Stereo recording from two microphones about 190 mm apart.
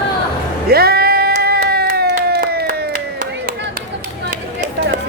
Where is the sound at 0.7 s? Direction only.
55° right (ahead or behind).